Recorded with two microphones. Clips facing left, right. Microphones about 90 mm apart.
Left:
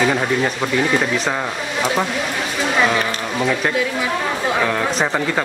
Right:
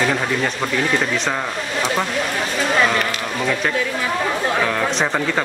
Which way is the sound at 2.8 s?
5° left (ahead or behind).